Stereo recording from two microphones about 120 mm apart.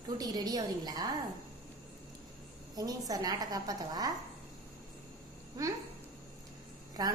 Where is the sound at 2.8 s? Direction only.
30° right (ahead or behind).